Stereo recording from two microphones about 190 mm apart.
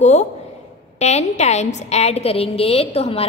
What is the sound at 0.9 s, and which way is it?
A woman's voice, 35° left (ahead or behind).